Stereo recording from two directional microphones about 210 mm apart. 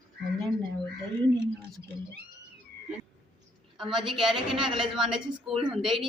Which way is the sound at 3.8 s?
Centre (ahead or behind).